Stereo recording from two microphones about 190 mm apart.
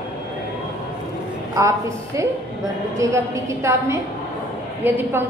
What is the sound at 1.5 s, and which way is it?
A woman's voice, 15° right (ahead or behind).